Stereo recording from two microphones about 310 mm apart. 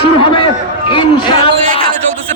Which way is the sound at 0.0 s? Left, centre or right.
Centre.